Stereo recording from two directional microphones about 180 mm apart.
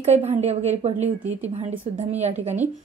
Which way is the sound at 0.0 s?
35° right (ahead or behind).